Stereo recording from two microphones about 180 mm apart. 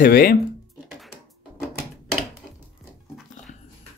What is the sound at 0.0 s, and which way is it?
Speech, 55° left (ahead or behind).